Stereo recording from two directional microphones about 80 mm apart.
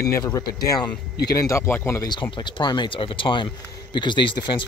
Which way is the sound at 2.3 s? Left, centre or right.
Left.